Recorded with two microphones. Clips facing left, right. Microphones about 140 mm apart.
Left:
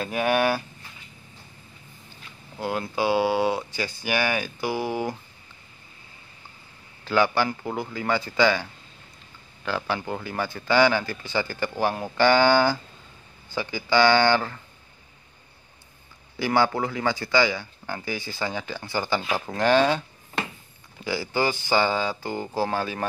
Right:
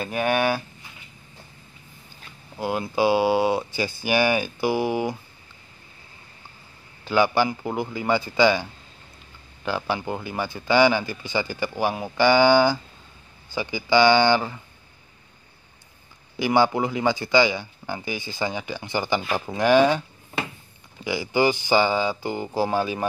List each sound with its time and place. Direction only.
0.0 s speech: centre (ahead or behind)
2.6 s speech: 10° right (ahead or behind)
3.4 s speech: 20° right (ahead or behind)
4.7 s speech: 10° right (ahead or behind)
7.1 s speech: 15° right (ahead or behind)
9.7 s speech: 15° right (ahead or behind)
16.3 s speech: 15° right (ahead or behind)